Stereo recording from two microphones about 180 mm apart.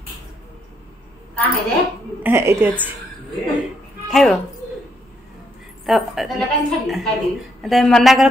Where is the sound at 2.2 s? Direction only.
10° right (ahead or behind).